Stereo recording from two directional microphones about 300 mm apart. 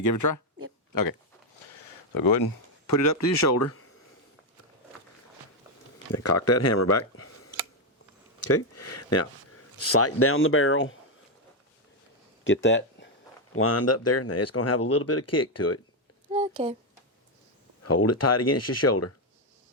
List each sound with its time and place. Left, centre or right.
0.0 s speech: left
2.8 s speech: left
6.2 s speech: left
12.6 s speech: left
13.6 s speech: left
16.3 s a sound: centre
17.8 s speech: left